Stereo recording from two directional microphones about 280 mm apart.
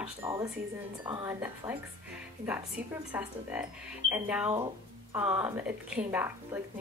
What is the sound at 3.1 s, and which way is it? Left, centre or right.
A woman's voice, centre.